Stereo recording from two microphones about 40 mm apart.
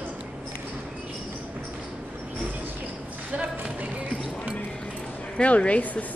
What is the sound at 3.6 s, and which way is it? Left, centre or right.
Music, right.